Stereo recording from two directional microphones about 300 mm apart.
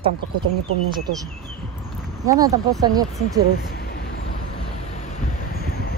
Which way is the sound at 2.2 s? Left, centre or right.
Centre.